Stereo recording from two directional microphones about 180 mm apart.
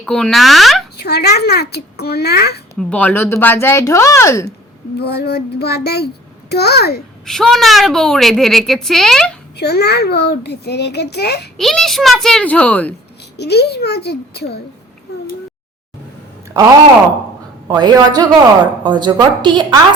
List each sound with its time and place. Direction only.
0.0 s a woman's voice: 5° left (ahead or behind)
1.0 s a child's voice: 65° left (ahead or behind)
2.7 s speech: 10° left (ahead or behind)
4.9 s a child's voice: 65° left (ahead or behind)
7.3 s a woman's voice: centre (ahead or behind)
9.6 s a child's voice: 65° left (ahead or behind)
11.5 s a woman's voice: centre (ahead or behind)
13.3 s a child's voice: 65° left (ahead or behind)
17.7 s a woman's voice: 20° right (ahead or behind)